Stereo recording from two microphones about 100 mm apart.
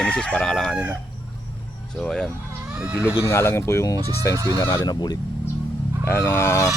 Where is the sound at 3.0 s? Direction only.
15° right (ahead or behind).